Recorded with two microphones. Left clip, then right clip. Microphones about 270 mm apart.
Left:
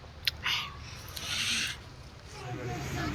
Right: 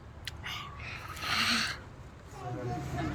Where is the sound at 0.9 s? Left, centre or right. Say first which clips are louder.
Right 3 dB; centre.